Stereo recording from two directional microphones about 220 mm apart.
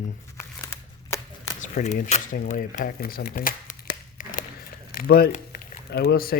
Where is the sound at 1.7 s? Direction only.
35° left (ahead or behind).